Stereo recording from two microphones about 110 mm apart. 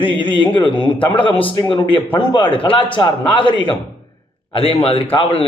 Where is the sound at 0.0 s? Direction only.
50° left (ahead or behind).